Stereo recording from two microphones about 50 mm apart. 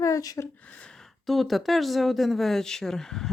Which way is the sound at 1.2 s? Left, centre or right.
Centre.